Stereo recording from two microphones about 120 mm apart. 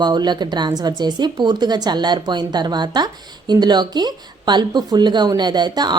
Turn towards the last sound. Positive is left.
turn(degrees=-35)  # may be behind; listen again after turning